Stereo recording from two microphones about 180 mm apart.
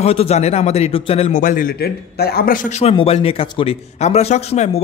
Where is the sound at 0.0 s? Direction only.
35° left (ahead or behind).